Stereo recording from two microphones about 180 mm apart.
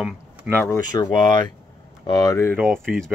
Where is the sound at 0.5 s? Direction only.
10° left (ahead or behind).